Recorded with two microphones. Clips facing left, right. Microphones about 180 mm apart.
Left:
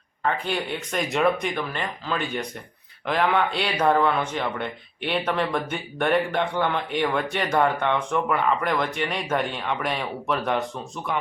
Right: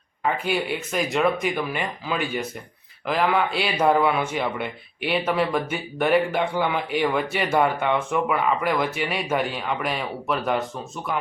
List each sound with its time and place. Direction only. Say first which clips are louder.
0.3 s speech: right 2 dB; 5° right (ahead or behind)